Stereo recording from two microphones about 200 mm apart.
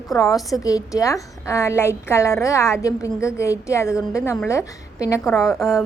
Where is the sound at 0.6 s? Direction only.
15° left (ahead or behind).